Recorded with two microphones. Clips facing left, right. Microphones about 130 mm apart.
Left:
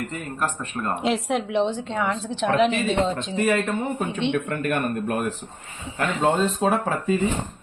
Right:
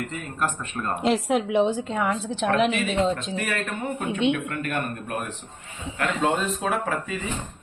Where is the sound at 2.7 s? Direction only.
35° left (ahead or behind).